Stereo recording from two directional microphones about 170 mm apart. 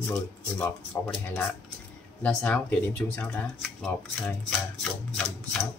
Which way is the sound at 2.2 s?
5° left (ahead or behind).